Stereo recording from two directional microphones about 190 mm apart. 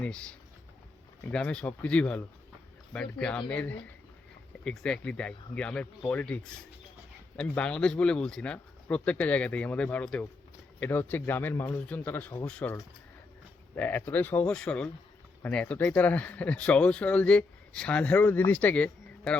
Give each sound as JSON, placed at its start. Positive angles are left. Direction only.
{"t": 0.0, "sound": "speech", "side_deg": 5}
{"t": 13.7, "sound": "speech", "side_deg": 10}